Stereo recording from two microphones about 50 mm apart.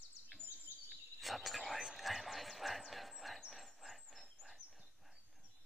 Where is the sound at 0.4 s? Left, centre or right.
Left.